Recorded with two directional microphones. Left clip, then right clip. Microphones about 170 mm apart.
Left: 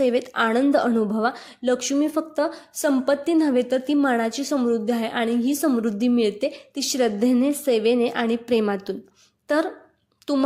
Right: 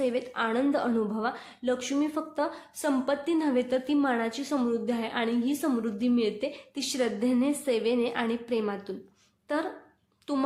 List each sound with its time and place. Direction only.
0.0 s a woman's voice: 40° left (ahead or behind)
10.3 s a woman's voice: 35° left (ahead or behind)